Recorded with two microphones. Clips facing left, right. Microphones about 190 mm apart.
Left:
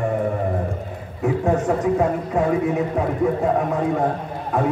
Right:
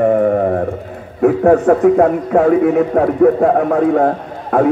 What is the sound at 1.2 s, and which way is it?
A man's voice, 65° right (ahead or behind).